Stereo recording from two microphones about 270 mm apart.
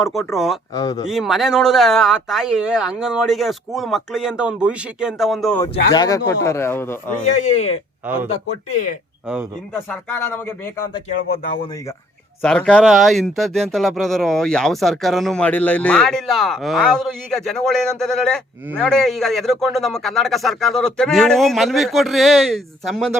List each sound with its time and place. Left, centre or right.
0.0 s speech: centre
0.7 s speech: centre
1.0 s speech: centre
5.6 s speech: centre
7.3 s speech: left
8.0 s speech: centre
8.7 s speech: left
9.7 s speech: centre
12.4 s speech: centre